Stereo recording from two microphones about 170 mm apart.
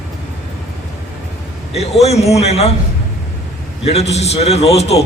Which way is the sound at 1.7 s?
40° left (ahead or behind).